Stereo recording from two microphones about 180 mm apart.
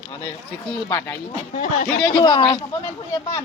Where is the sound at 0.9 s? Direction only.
15° left (ahead or behind).